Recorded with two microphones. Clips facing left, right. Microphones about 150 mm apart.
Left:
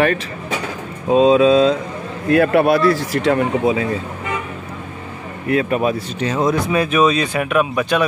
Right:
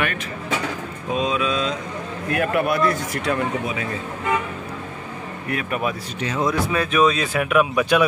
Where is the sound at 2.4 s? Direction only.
90° left.